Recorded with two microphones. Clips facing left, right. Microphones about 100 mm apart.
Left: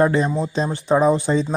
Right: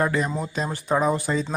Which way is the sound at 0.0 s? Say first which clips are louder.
Left 6 dB; 30° left (ahead or behind).